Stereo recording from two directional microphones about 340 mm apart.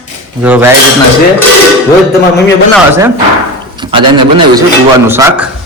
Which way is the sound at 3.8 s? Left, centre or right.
Centre.